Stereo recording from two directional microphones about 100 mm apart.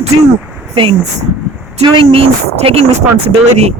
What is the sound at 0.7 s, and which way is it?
Speech, 65° right (ahead or behind).